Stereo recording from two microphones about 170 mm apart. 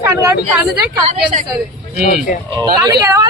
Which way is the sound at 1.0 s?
45° right (ahead or behind).